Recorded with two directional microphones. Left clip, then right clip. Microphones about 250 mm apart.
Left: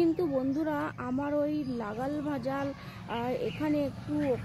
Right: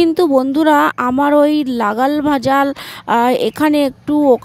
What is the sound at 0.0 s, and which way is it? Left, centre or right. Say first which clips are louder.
A woman's voice: right 16 dB; right.